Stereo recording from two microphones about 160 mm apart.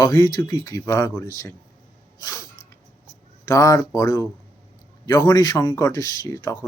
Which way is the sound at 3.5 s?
20° left (ahead or behind).